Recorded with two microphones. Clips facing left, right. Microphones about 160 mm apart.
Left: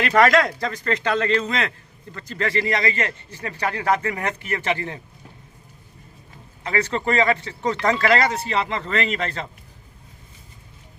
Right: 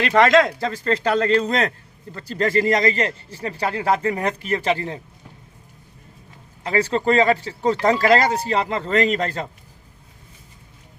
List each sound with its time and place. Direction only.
0.2 s a man's voice: 25° right (ahead or behind)
6.7 s a man's voice: 30° right (ahead or behind)